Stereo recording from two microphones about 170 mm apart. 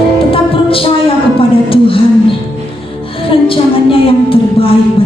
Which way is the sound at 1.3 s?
30° left (ahead or behind).